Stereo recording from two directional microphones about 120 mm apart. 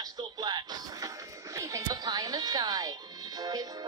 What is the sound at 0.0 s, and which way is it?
Music, 35° right (ahead or behind).